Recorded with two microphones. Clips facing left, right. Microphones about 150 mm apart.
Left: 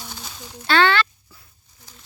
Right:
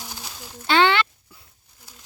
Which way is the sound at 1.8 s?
5° right (ahead or behind).